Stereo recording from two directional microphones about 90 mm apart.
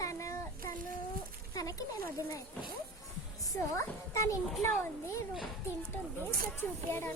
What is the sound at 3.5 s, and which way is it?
A child's voice, 35° left (ahead or behind).